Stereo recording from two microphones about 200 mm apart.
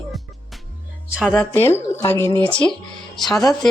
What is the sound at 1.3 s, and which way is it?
Speech, 10° left (ahead or behind).